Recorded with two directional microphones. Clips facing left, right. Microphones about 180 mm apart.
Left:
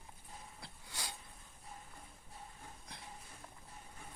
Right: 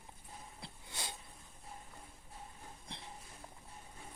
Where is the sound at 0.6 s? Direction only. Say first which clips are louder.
Right 2 dB; 20° right (ahead or behind).